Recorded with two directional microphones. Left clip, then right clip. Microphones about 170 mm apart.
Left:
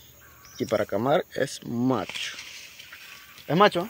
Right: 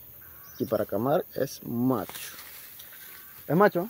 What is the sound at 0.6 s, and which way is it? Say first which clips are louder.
Speech: left 2 dB; 5° left (ahead or behind).